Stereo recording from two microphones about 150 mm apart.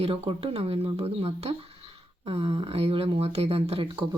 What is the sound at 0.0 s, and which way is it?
Speech, 40° right (ahead or behind).